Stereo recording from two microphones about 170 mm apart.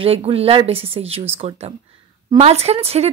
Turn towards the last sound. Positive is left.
turn(degrees=-35)  # may be behind; listen again after turning